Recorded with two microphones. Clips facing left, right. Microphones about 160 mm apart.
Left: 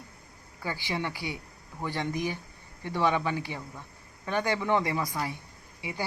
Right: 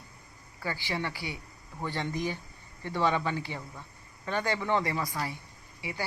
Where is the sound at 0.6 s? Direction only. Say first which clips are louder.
Left 1 dB; 15° left (ahead or behind).